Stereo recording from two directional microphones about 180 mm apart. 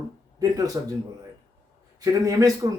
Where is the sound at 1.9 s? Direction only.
20° right (ahead or behind).